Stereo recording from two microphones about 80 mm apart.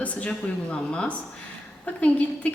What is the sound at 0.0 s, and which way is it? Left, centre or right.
Speech, centre.